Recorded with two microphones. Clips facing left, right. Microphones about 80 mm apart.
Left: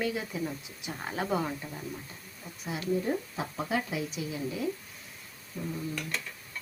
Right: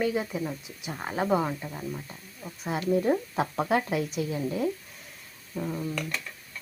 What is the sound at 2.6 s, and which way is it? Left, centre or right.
A woman's voice, right.